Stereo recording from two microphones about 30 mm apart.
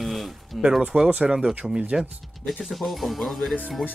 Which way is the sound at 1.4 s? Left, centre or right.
Right.